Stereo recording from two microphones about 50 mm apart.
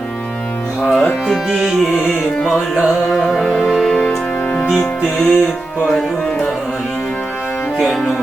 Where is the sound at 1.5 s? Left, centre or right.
Right.